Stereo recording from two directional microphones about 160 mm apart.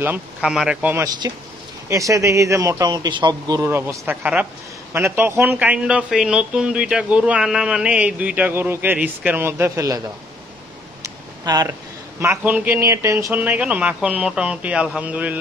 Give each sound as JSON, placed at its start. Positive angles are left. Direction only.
{"t": 0.0, "sound": "speech", "side_deg": -10}
{"t": 1.2, "sound": "speech", "side_deg": -20}
{"t": 11.0, "sound": "a sound", "side_deg": -25}
{"t": 12.2, "sound": "speech", "side_deg": -15}